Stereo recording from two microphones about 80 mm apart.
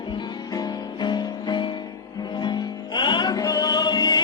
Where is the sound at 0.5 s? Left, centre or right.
Left.